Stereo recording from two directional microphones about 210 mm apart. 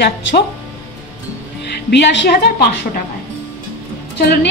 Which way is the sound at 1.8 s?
50° left (ahead or behind).